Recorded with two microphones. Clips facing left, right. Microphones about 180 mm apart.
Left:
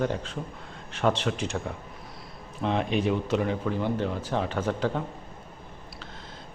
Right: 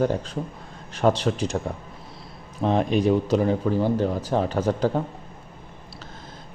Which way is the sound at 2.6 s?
40° right (ahead or behind).